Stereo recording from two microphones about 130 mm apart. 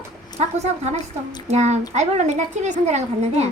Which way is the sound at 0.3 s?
60° right (ahead or behind).